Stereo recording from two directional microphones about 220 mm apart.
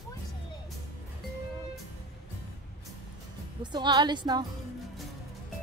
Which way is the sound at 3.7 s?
20° right (ahead or behind).